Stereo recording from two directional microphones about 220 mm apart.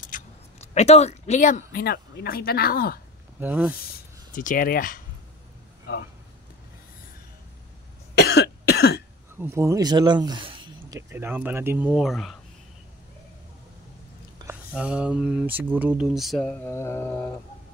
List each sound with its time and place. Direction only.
0.0 s speech: 35° left (ahead or behind)
3.3 s speech: 5° right (ahead or behind)
3.8 s speech: 40° left (ahead or behind)
8.1 s cough: 50° left (ahead or behind)
9.4 s speech: 10° right (ahead or behind)
14.4 s speech: 5° right (ahead or behind); by 17.3 s 10° left (ahead or behind)